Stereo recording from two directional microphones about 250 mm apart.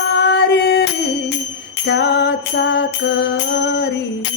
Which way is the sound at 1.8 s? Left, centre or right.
Left.